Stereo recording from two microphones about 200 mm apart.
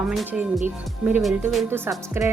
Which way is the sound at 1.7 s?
15° right (ahead or behind).